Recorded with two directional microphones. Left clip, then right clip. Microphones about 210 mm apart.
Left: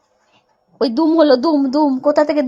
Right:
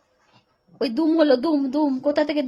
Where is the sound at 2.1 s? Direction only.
Centre (ahead or behind).